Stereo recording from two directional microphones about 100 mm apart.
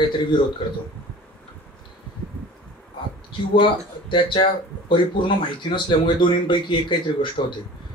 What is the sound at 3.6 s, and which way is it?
Speech, 55° left (ahead or behind).